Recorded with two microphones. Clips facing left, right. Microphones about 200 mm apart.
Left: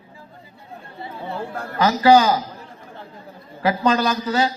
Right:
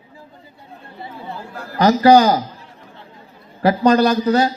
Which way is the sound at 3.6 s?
40° right (ahead or behind).